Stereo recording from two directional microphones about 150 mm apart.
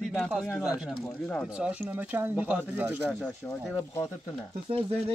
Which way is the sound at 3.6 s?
Centre (ahead or behind).